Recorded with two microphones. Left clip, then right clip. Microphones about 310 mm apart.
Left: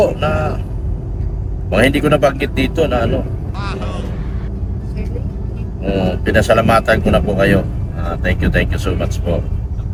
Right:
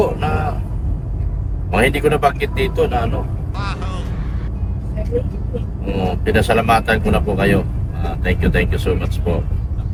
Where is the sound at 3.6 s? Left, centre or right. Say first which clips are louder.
Left 2 dB; centre.